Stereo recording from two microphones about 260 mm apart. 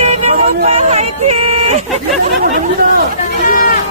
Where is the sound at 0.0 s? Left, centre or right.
Right.